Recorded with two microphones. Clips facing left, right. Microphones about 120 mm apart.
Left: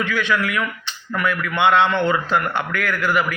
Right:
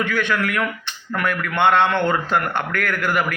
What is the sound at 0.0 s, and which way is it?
A man's voice, 50° right (ahead or behind).